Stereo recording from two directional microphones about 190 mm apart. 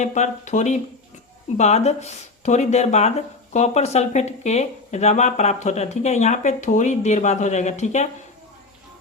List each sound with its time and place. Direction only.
0.0 s speech: 40° left (ahead or behind)